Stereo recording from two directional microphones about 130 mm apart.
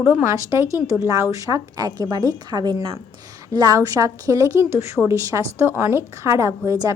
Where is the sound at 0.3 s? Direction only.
25° right (ahead or behind).